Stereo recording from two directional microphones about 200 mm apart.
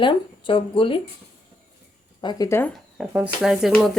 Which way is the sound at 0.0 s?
25° left (ahead or behind).